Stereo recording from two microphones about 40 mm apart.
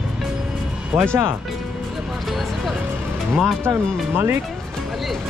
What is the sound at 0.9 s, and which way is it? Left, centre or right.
Speech, right.